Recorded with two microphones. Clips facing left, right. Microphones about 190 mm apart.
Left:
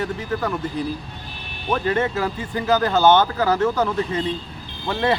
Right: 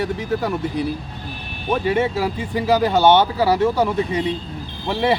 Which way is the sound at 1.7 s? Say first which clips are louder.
Right 2 dB; 10° right (ahead or behind).